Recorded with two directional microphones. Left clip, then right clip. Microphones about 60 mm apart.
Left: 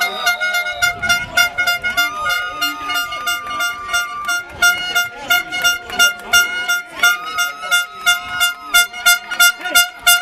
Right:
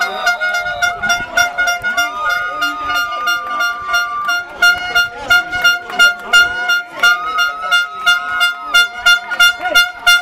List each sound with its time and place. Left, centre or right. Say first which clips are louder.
0.0 s music: right 2 dB; left
5.6 s vehicle horn: right 4 dB; left